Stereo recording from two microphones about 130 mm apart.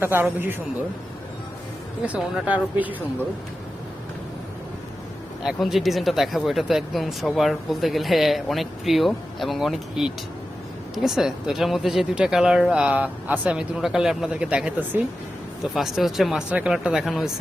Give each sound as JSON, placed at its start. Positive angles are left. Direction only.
{"t": 0.0, "sound": "speech", "side_deg": -15}
{"t": 2.0, "sound": "speech", "side_deg": -10}
{"t": 5.4, "sound": "speech", "side_deg": -5}